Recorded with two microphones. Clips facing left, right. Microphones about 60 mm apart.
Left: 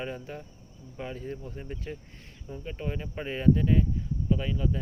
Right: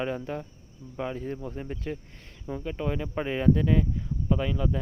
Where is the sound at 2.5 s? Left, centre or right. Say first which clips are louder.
Right 5 dB; right.